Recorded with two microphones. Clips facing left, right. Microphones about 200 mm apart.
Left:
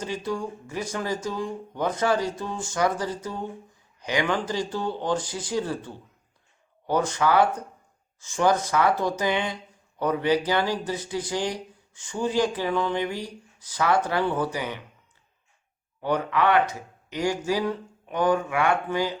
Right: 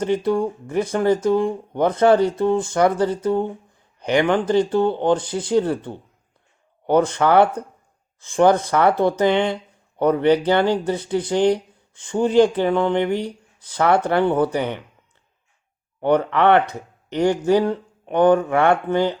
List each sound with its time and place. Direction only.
0.0 s speech: 60° right (ahead or behind)
16.0 s speech: 60° right (ahead or behind)